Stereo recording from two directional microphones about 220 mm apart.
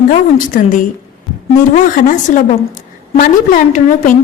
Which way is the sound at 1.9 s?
35° left (ahead or behind).